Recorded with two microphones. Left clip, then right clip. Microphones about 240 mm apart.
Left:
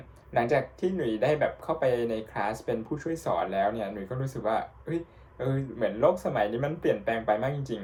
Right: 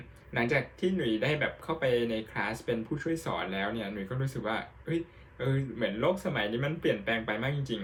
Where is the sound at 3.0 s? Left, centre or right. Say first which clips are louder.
Left 4 dB; centre.